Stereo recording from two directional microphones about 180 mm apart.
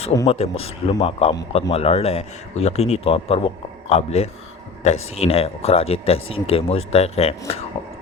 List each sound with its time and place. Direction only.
0.3 s speech: 35° left (ahead or behind)